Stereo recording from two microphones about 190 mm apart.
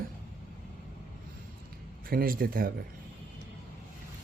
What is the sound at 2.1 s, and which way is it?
Speech, 50° right (ahead or behind).